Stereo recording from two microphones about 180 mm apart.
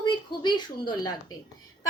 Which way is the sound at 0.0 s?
25° left (ahead or behind).